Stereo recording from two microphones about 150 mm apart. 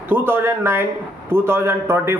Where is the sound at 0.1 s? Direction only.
15° right (ahead or behind).